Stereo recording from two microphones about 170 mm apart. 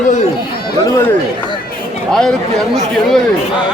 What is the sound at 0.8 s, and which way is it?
Speech, 15° left (ahead or behind).